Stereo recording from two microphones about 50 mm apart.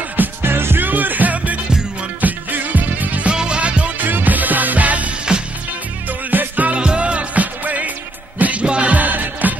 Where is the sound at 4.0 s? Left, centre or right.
Right.